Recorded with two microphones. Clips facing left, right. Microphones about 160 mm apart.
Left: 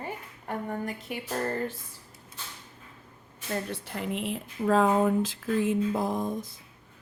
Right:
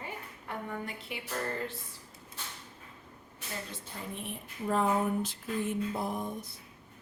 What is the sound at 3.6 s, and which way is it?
Speech, 65° left (ahead or behind).